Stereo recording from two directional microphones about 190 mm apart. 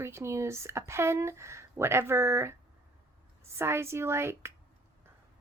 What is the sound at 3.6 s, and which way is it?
Speech, 15° right (ahead or behind).